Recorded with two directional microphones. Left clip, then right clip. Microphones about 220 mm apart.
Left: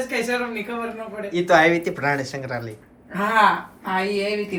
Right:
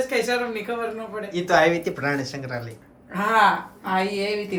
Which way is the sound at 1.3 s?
10° right (ahead or behind).